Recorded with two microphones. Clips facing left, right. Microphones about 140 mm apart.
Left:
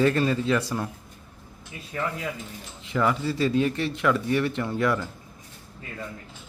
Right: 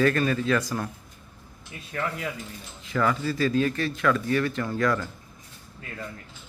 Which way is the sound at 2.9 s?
20° left (ahead or behind).